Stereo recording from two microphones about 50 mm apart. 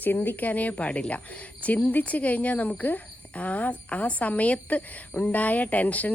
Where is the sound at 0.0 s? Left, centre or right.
Left.